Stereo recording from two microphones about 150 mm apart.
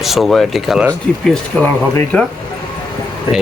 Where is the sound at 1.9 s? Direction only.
10° left (ahead or behind).